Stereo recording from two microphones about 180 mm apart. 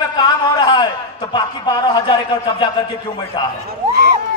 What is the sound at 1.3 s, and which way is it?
Speech, 25° left (ahead or behind).